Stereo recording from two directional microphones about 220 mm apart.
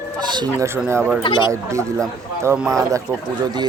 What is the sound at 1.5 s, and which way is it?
Speech, 15° right (ahead or behind).